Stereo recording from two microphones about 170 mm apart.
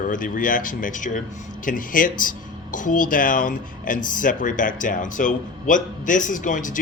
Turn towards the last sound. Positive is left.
turn(degrees=50)  # may be behind; listen again after turning